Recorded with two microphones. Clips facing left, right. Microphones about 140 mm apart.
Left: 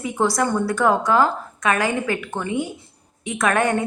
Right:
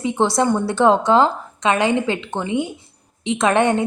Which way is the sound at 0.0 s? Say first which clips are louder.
Right 3 dB; 25° right (ahead or behind).